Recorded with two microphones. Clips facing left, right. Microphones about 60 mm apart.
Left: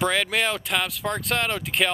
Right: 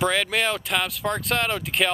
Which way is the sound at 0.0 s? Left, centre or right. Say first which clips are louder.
Even; centre.